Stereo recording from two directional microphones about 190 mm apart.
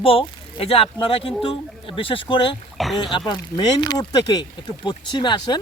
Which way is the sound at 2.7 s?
Centre (ahead or behind).